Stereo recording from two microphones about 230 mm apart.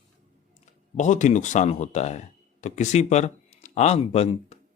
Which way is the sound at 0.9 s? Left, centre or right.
Left.